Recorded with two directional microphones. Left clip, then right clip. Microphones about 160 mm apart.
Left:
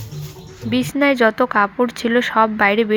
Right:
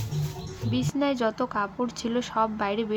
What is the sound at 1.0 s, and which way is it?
Speech, 25° left (ahead or behind).